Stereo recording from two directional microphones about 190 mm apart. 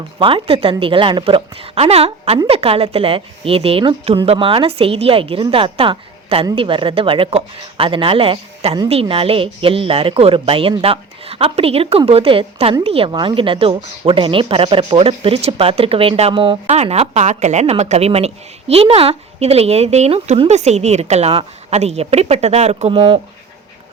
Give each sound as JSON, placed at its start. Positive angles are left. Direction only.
{"t": 0.2, "sound": "a woman's voice", "side_deg": -25}